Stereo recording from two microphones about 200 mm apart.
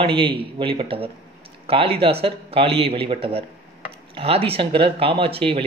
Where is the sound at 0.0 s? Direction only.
25° right (ahead or behind).